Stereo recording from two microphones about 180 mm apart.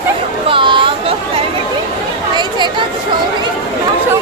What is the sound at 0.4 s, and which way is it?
Chatter, 30° right (ahead or behind).